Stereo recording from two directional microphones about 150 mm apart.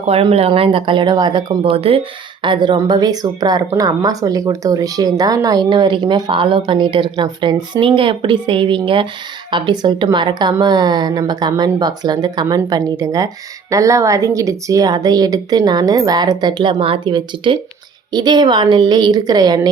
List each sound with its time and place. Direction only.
0.0 s speech: 40° right (ahead or behind)